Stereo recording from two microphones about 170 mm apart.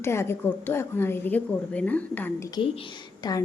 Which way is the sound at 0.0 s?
15° left (ahead or behind).